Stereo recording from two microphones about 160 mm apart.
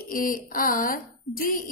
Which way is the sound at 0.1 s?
60° left (ahead or behind).